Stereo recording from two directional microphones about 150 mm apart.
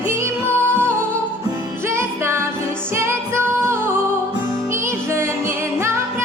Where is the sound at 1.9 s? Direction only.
15° right (ahead or behind).